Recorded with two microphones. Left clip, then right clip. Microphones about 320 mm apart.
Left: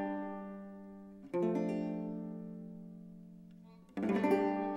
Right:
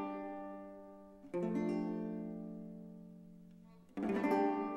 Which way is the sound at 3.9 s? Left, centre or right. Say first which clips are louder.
Left 3 dB; left.